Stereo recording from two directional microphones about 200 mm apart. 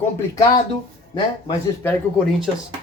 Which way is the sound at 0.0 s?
10° left (ahead or behind).